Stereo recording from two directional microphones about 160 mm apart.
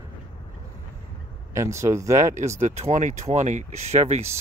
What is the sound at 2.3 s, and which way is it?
Speech, 45° right (ahead or behind).